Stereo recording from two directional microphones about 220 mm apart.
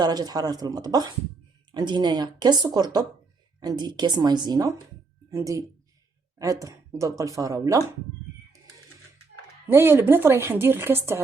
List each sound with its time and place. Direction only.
0.0 s speech: 20° right (ahead or behind)
9.7 s speech: 10° right (ahead or behind)